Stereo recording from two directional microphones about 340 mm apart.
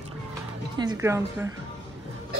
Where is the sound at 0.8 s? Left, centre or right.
Centre.